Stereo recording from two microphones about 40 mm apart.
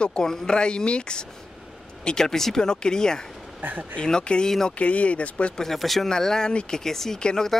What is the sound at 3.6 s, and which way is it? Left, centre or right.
Speech, right.